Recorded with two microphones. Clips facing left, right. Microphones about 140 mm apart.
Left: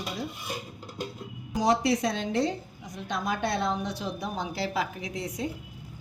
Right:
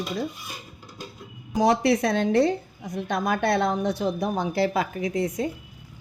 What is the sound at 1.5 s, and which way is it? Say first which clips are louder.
A woman's voice: right 4 dB; 60° right (ahead or behind).